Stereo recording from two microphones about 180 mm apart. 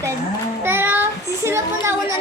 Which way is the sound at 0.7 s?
10° right (ahead or behind).